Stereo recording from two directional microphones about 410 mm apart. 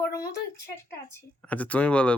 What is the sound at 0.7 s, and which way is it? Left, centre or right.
Speech, centre.